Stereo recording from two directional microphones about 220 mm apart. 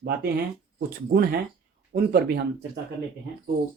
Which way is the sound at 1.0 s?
45° right (ahead or behind).